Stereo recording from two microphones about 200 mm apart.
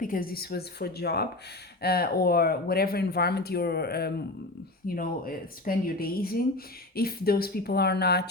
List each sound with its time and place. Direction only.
0.0 s speech: 45° left (ahead or behind)